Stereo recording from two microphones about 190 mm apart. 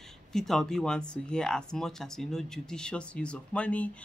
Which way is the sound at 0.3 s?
5° left (ahead or behind).